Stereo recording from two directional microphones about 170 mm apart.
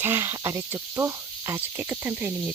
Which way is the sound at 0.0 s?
15° right (ahead or behind).